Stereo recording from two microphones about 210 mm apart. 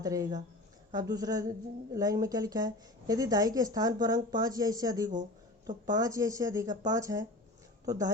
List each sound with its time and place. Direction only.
0.0 s speech: 15° right (ahead or behind)